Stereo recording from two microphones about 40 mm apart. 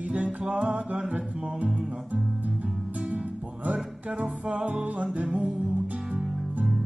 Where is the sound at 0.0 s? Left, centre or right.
Right.